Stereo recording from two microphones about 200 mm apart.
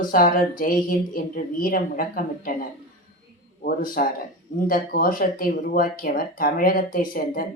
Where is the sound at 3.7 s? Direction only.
45° left (ahead or behind).